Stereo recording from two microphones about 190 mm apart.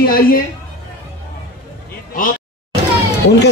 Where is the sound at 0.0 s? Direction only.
50° left (ahead or behind).